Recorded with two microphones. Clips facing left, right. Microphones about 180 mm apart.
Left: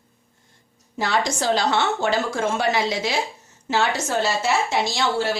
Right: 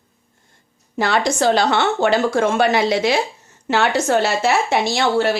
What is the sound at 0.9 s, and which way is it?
Speech, 65° right (ahead or behind).